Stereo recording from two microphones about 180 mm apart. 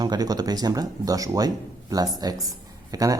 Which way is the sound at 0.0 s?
20° right (ahead or behind).